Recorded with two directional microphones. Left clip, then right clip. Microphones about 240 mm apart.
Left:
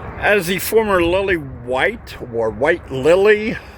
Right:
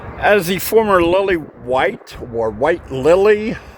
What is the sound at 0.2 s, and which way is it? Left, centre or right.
Speech, centre.